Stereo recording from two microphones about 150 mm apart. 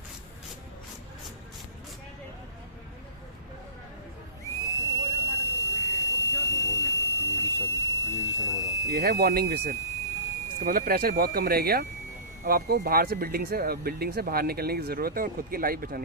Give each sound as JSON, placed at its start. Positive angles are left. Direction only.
{"t": 4.4, "sound": "whistle", "side_deg": 20}
{"t": 5.0, "sound": "a sound", "side_deg": 20}
{"t": 9.0, "sound": "speech", "side_deg": -90}
{"t": 10.7, "sound": "speech", "side_deg": -75}